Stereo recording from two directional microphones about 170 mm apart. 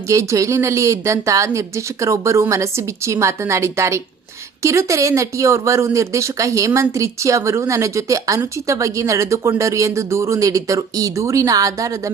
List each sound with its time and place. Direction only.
0.1 s speech: 20° right (ahead or behind)